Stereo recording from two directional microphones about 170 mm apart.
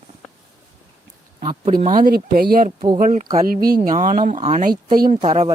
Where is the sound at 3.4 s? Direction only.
60° right (ahead or behind).